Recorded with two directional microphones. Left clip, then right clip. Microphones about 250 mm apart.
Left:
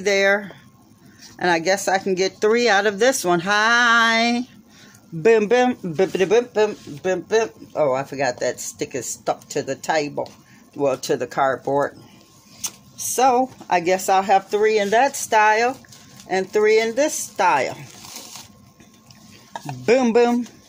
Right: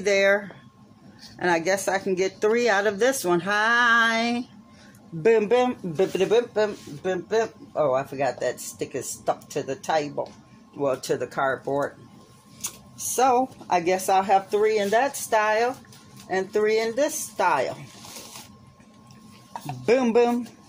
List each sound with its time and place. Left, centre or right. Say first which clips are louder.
0.0 s speech: left 2 dB; left
12.6 s speech: left 4 dB; left
14.6 s speech: left 4 dB; left
19.6 s speech: left 4 dB; left